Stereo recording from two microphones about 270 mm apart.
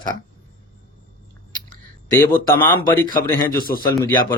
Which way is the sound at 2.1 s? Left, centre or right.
Centre.